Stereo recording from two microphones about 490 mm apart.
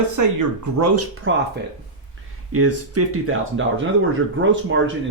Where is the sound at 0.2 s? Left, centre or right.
Right.